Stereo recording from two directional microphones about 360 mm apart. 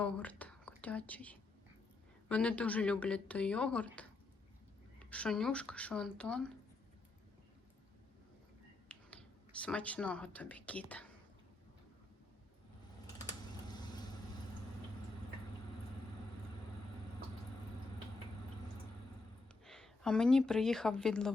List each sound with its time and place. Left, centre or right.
0.0 s whispering: centre
0.8 s speech: centre
8.9 s speech: centre
19.6 s speech: centre